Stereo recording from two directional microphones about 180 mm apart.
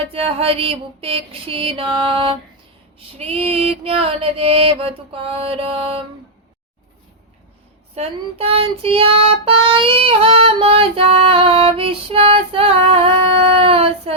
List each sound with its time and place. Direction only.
0.0 s child singing: 30° right (ahead or behind)
7.9 s child singing: 35° right (ahead or behind)